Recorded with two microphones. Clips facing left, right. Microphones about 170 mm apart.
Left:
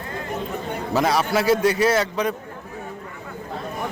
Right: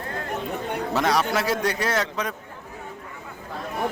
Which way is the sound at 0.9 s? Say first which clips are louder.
Left 3 dB; centre (ahead or behind).